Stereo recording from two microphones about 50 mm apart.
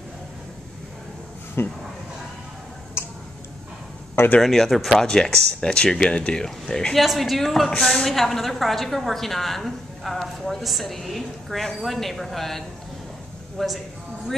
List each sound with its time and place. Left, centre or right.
1.6 s speech: left
4.4 s a woman's voice: centre
5.0 s speech: centre
7.0 s a woman's voice: centre